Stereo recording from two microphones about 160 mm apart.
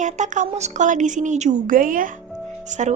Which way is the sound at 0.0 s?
50° right (ahead or behind).